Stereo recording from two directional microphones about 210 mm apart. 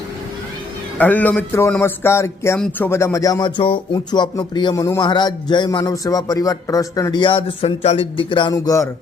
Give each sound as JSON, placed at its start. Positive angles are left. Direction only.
{"t": 0.9, "sound": "speech", "side_deg": 5}